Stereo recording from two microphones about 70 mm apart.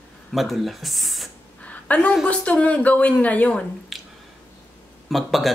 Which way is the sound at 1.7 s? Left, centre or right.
Left.